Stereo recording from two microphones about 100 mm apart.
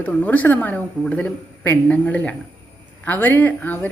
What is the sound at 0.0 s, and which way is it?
A woman's voice, 15° left (ahead or behind).